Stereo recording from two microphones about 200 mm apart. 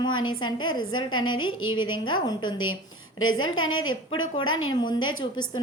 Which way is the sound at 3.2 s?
90° left.